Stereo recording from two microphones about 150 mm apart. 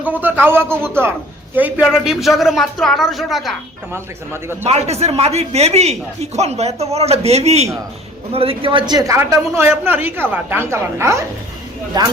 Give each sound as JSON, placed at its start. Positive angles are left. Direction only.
{"t": 0.0, "sound": "a woman's voice", "side_deg": -10}
{"t": 3.9, "sound": "a woman's voice", "side_deg": -15}
{"t": 4.6, "sound": "a man's voice", "side_deg": -45}
{"t": 9.6, "sound": "a woman's voice", "side_deg": -15}